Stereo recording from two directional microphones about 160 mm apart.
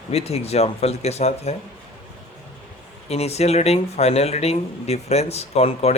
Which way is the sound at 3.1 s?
40° left (ahead or behind).